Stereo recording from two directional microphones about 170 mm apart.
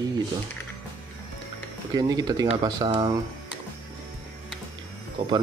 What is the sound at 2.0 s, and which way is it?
Speech, 25° right (ahead or behind).